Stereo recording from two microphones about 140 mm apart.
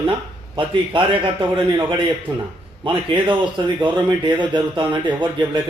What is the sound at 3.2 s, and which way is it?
Speech, 35° right (ahead or behind).